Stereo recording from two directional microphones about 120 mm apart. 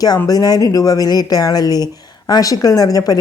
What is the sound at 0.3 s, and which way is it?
Speech, 30° left (ahead or behind).